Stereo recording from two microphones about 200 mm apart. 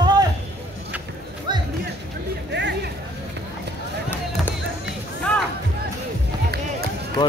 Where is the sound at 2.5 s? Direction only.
60° right (ahead or behind).